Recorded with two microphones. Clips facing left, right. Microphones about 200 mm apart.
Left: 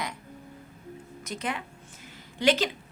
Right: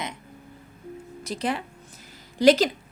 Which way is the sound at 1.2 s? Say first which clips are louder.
Right 5 dB; 35° right (ahead or behind).